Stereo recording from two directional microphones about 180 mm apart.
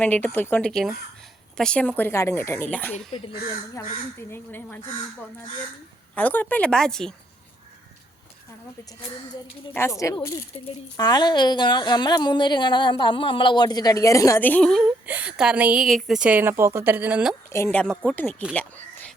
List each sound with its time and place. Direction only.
0.0 s speech: 10° left (ahead or behind)
4.3 s speech: 10° left (ahead or behind)
6.1 s speech: 10° left (ahead or behind)
9.7 s a woman's voice: 15° left (ahead or behind)
15.0 s a woman's voice: 10° right (ahead or behind)
17.5 s speech: 10° left (ahead or behind)